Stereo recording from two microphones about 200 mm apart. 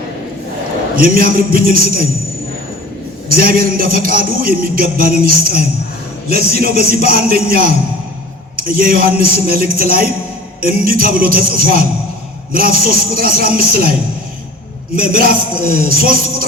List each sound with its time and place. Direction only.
0.9 s a man's voice: 45° right (ahead or behind)
3.2 s a man's voice: 45° right (ahead or behind)
14.9 s a man's voice: 45° right (ahead or behind)